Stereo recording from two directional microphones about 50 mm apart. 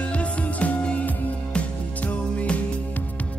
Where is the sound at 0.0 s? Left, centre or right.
Left.